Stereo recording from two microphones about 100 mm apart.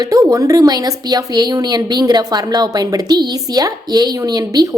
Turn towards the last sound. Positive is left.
turn(degrees=-40)  # may be behind; listen again after turning